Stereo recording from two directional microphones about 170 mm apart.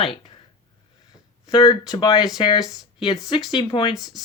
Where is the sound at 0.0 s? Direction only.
30° left (ahead or behind).